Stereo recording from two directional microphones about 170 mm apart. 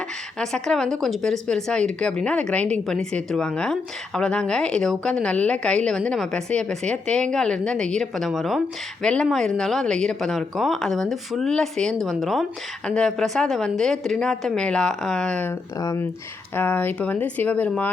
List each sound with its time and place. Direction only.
0.3 s speech: 5° left (ahead or behind)
15.8 s speech: 20° left (ahead or behind)